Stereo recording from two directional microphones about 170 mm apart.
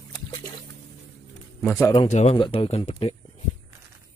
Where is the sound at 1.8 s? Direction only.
25° left (ahead or behind).